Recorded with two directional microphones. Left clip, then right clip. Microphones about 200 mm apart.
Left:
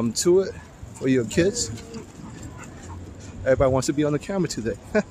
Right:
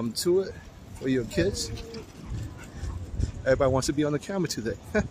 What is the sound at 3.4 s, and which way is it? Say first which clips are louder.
Speech: left 4 dB; centre (ahead or behind).